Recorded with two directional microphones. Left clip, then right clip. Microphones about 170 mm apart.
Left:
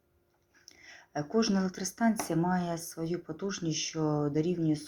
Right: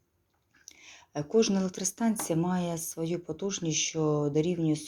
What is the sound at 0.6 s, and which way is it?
Speech, 30° right (ahead or behind).